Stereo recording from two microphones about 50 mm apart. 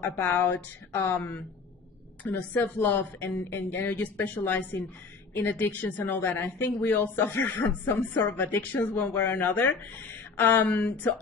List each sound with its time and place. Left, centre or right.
0.0 s a woman's voice: left